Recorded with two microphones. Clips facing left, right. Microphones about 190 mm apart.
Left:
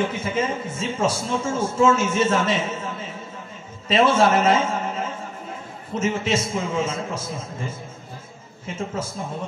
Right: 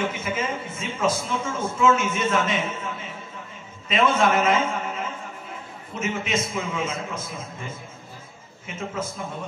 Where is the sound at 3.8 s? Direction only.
35° left (ahead or behind).